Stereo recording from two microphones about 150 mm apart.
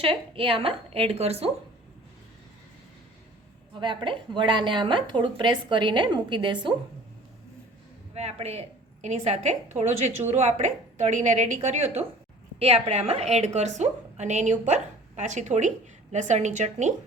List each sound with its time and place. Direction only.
0.0 s a woman's voice: 35° right (ahead or behind)
3.8 s a woman's voice: 35° right (ahead or behind)
8.1 s a woman's voice: 45° right (ahead or behind)